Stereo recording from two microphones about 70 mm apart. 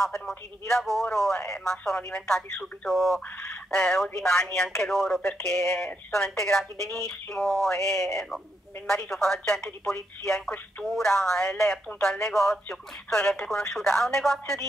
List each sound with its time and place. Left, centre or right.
0.0 s speech: centre
3.7 s speech: centre
4.7 s speech: centre